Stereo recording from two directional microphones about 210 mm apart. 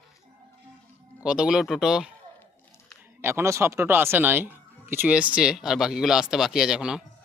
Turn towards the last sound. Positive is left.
turn(degrees=-5)  # may be behind; listen again after turning